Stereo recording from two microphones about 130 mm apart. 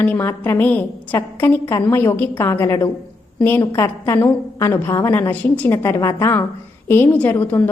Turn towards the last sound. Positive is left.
turn(degrees=15)  # may be behind; listen again after turning